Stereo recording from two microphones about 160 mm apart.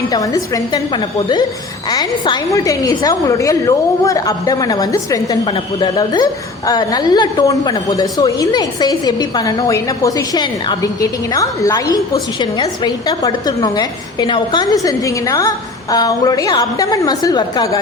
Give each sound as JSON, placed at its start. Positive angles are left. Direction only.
{"t": 0.1, "sound": "a woman's voice", "side_deg": 20}